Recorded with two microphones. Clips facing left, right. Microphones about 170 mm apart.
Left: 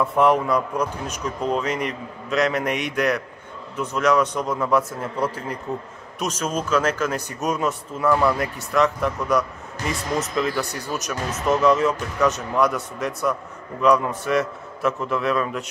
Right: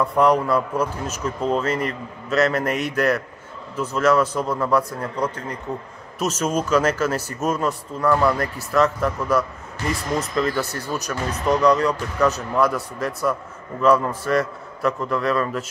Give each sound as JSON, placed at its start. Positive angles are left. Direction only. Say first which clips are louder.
{"t": 0.0, "sound": "speech", "louder": "right 1 dB", "side_deg": 0}
{"t": 6.4, "sound": "speech", "louder": "right 2 dB", "side_deg": -10}